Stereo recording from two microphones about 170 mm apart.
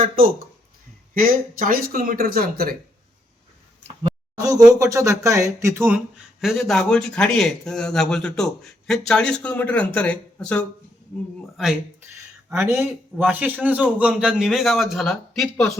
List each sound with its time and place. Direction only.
1.1 s speech: 55° right (ahead or behind)
4.4 s speech: 20° right (ahead or behind)
6.4 s a man's voice: centre (ahead or behind)
12.5 s a man's voice: 15° right (ahead or behind); by 15.7 s centre (ahead or behind)